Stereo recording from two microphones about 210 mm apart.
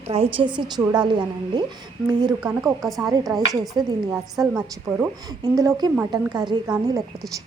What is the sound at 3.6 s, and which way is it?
Speech, centre (ahead or behind).